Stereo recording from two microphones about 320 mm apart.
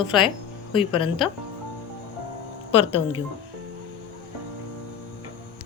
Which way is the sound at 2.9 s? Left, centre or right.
Centre.